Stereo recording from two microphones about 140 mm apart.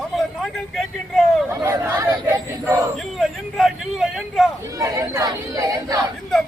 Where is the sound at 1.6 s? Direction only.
20° right (ahead or behind).